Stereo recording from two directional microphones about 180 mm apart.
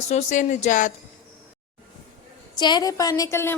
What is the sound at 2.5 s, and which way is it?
A woman's voice, 25° left (ahead or behind).